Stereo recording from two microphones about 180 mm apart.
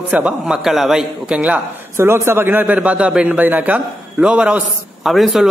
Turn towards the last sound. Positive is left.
turn(degrees=0)  # may be behind; listen again after turning